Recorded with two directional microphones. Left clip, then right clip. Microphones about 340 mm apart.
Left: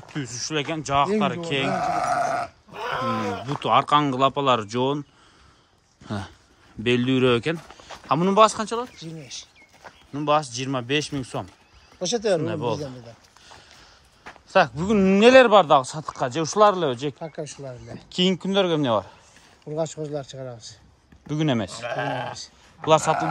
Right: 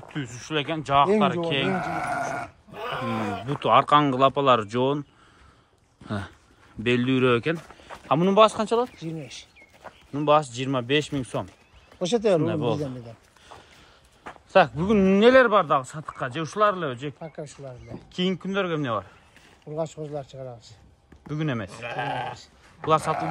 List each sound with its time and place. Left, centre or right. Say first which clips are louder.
0.1 s speech: left 1 dB; centre
1.7 s sheep: left 4 dB; left
2.7 s a sound: left 3 dB; centre
3.3 s speech: even; centre
6.0 s speech: even; centre
8.9 s speech: right 1 dB; centre
9.8 s speech: right 1 dB; centre
12.0 s speech: right 1 dB; right
12.4 s speech: right 1 dB; centre
14.2 s speech: even; centre
17.2 s speech: left 4 dB; left
18.1 s speech: left 5 dB; centre
19.6 s speech: left 3 dB; left
21.3 s speech: left 5 dB; centre